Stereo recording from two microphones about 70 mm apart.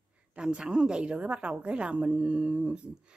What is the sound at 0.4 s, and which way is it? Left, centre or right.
A woman's voice, centre.